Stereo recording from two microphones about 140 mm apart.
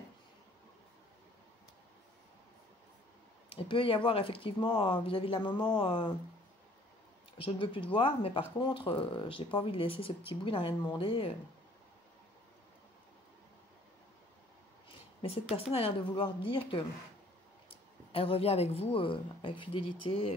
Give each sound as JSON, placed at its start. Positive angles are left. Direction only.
{"t": 3.4, "sound": "speech", "side_deg": 40}
{"t": 7.3, "sound": "speech", "side_deg": 40}
{"t": 14.9, "sound": "a sound", "side_deg": 45}
{"t": 15.5, "sound": "speech", "side_deg": 45}